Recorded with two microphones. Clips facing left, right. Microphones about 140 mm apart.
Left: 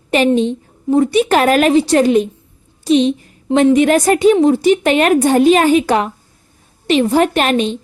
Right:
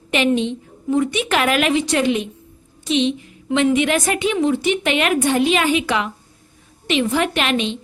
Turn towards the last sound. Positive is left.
turn(degrees=40)  # may be behind; listen again after turning